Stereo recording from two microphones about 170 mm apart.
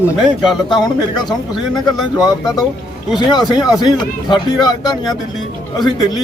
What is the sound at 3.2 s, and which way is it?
Speech, 25° left (ahead or behind).